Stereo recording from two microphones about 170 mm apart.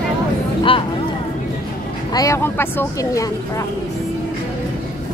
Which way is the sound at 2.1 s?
20° left (ahead or behind).